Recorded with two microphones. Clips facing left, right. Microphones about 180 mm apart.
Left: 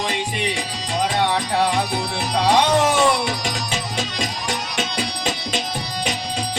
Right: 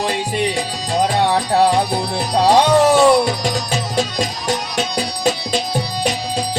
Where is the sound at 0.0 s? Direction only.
35° right (ahead or behind).